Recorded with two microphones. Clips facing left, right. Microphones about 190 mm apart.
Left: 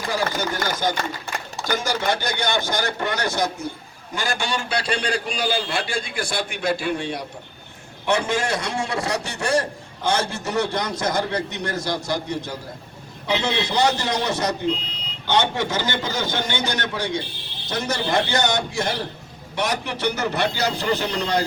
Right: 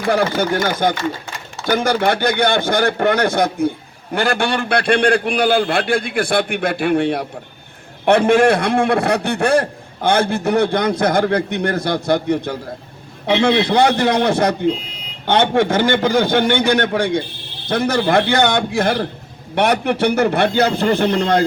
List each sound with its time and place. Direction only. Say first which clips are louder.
0.0 s a man's voice: right 8 dB; 60° right (ahead or behind)